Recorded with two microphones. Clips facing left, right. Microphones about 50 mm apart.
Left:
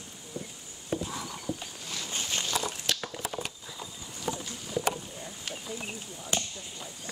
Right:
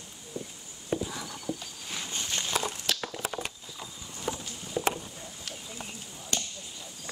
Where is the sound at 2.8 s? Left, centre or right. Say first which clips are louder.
Even; centre.